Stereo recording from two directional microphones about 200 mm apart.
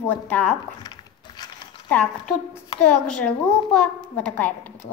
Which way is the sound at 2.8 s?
5° left (ahead or behind).